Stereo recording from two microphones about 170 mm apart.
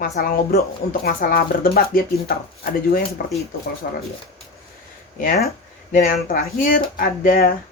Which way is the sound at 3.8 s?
60° left (ahead or behind).